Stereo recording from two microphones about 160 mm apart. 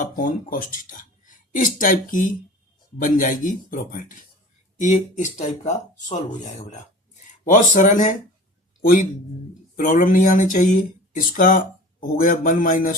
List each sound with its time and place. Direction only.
0.0 s a man's voice: 60° left (ahead or behind)